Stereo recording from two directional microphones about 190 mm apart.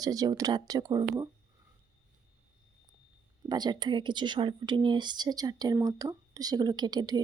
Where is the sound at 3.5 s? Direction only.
20° right (ahead or behind).